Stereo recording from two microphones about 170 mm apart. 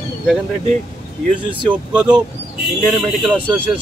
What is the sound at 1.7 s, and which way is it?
Speech, 5° right (ahead or behind).